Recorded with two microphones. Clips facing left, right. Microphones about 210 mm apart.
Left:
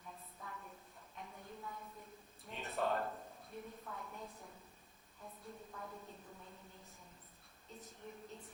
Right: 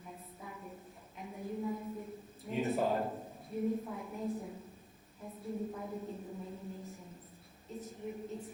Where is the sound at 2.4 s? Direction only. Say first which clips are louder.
Right 8 dB; centre (ahead or behind).